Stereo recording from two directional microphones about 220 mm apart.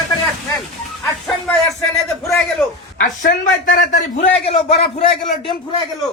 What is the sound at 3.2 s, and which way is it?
A man's voice, 35° left (ahead or behind).